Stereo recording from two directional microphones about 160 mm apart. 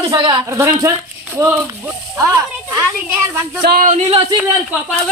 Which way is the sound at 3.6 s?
60° right (ahead or behind).